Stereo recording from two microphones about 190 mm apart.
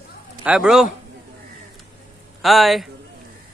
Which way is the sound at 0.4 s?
5° right (ahead or behind).